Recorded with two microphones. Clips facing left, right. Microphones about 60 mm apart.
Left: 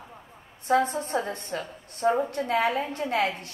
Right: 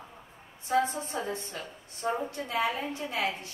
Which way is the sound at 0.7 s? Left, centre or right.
Left.